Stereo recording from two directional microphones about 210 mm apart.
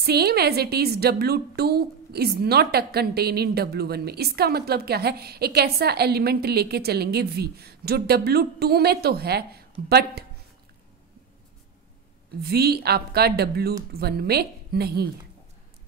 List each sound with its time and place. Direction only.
0.0 s a woman's voice: 50° right (ahead or behind)
12.4 s a woman's voice: 50° right (ahead or behind)